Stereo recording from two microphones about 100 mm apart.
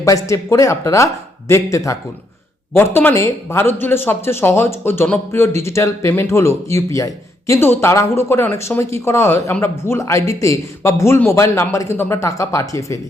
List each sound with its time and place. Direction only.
0.0 s speech: 35° left (ahead or behind)